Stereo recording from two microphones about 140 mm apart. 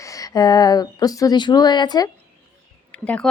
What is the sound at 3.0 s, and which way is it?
Speech, 10° left (ahead or behind).